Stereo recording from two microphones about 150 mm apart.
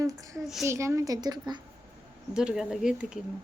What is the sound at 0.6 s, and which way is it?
A woman's voice, 20° right (ahead or behind).